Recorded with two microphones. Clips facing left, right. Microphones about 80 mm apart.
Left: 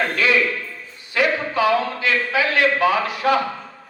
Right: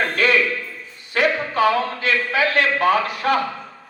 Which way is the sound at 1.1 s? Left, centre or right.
Right.